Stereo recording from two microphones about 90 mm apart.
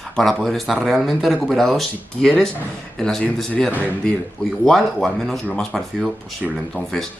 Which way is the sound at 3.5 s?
15° left (ahead or behind).